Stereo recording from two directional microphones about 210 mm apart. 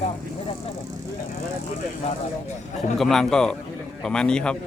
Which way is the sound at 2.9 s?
Centre (ahead or behind).